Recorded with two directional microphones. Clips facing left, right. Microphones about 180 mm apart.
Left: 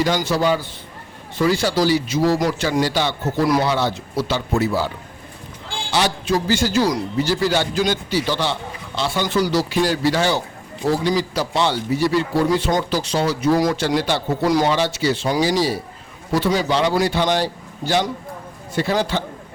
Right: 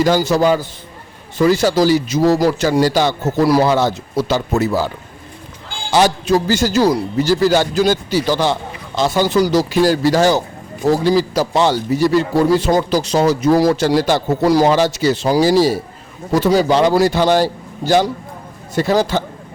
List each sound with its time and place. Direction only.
0.0 s a man's voice: 40° right (ahead or behind)
5.9 s a man's voice: 45° right (ahead or behind)